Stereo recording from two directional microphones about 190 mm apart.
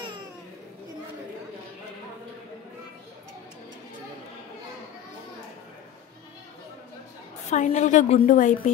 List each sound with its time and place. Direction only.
7.5 s a woman's voice: 40° left (ahead or behind)